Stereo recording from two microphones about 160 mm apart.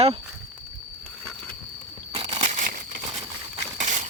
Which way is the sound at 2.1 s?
40° right (ahead or behind).